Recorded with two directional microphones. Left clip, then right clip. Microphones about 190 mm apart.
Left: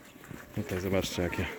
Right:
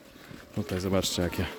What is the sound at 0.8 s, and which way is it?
Speech, 20° right (ahead or behind).